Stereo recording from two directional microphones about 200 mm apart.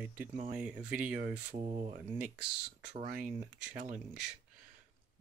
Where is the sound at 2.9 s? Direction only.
40° right (ahead or behind).